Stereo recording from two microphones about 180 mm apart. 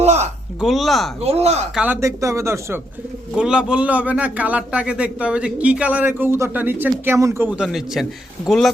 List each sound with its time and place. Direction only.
0.0 s a sound: 40° right (ahead or behind)
0.6 s speech: centre (ahead or behind)
1.2 s speech: 35° right (ahead or behind)
1.7 s a man's voice: 10° right (ahead or behind)